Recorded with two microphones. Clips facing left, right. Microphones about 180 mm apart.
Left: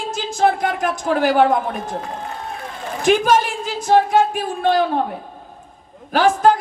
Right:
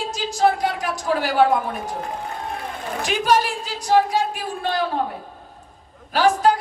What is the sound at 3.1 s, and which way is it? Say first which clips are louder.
Female singing: left 5 dB; 50° left (ahead or behind).